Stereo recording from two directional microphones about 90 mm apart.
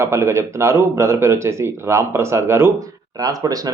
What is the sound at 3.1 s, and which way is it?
Speech, 45° right (ahead or behind).